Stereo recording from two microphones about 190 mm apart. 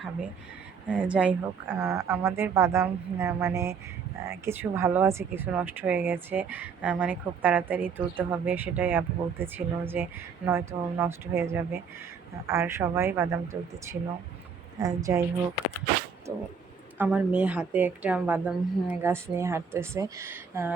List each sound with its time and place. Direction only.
0.9 s speech: 5° right (ahead or behind)
17.0 s speech: 5° right (ahead or behind)